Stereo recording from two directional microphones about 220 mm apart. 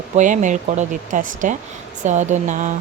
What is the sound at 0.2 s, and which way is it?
Speech, 35° right (ahead or behind).